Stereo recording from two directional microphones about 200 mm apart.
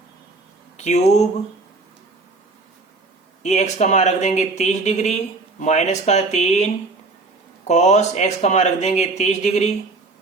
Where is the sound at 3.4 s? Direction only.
35° left (ahead or behind).